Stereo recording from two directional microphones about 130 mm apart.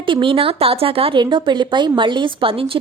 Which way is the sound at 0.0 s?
40° right (ahead or behind).